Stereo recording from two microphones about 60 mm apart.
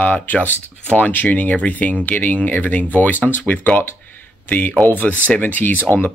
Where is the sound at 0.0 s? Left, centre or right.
Left.